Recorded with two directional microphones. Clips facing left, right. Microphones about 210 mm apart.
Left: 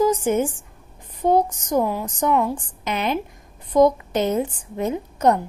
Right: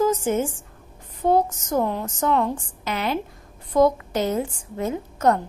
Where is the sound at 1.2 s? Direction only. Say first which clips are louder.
Left 1 dB; 15° left (ahead or behind).